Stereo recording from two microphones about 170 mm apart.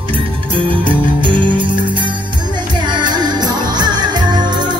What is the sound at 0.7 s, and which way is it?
Music, 30° right (ahead or behind).